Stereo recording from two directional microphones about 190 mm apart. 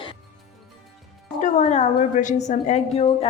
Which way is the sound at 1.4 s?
35° left (ahead or behind).